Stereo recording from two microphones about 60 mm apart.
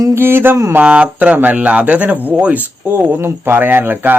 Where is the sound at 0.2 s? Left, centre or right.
Right.